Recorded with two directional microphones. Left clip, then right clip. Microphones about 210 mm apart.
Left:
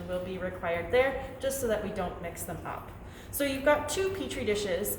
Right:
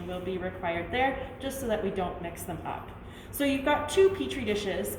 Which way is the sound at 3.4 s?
15° left (ahead or behind).